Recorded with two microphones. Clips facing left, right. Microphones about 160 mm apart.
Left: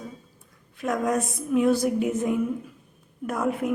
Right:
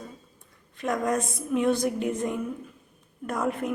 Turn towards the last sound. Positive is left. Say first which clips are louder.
# left 2 dB
turn(degrees=5)  # may be behind; listen again after turning